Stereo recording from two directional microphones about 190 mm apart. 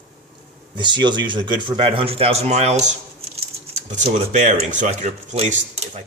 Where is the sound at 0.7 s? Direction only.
25° right (ahead or behind).